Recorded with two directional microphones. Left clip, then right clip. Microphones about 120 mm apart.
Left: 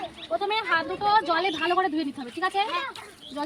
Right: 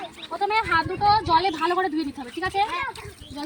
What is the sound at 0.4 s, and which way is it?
Speech, 25° left (ahead or behind).